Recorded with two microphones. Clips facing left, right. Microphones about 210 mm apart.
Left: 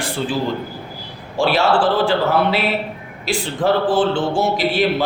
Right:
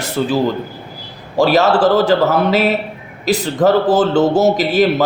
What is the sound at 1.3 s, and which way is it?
Mantra, 40° right (ahead or behind).